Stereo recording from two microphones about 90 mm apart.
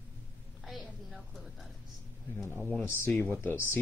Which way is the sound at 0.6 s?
Centre (ahead or behind).